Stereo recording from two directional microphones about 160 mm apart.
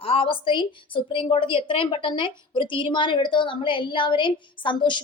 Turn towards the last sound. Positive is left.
turn(degrees=30)  # may be behind; listen again after turning